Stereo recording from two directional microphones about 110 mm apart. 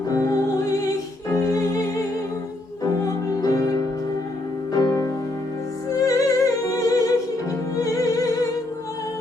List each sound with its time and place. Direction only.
0.1 s music: 30° left (ahead or behind)